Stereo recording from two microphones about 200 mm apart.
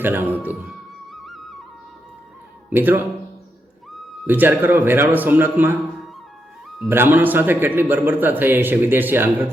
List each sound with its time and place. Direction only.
0.0 s a man's voice: 10° right (ahead or behind)
1.1 s music: centre (ahead or behind)
2.6 s a man's voice: 10° right (ahead or behind)